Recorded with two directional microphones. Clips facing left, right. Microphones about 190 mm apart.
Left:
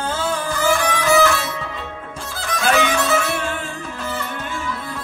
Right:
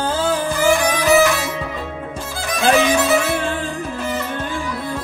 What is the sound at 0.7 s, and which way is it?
Music, 15° right (ahead or behind).